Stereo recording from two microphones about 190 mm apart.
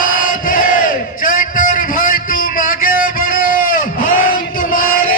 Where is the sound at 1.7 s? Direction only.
45° left (ahead or behind).